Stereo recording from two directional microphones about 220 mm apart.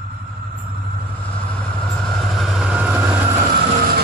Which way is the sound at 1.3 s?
5° left (ahead or behind).